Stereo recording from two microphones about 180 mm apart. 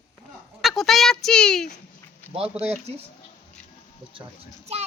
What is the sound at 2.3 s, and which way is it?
Speech, 35° right (ahead or behind).